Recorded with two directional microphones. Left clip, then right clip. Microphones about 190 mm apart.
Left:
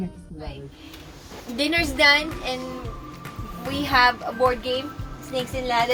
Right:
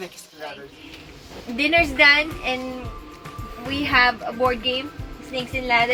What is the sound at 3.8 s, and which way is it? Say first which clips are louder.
Speech: right 1 dB; 20° right (ahead or behind).